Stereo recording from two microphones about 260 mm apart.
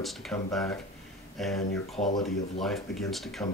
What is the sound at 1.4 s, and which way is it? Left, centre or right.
Speech, centre.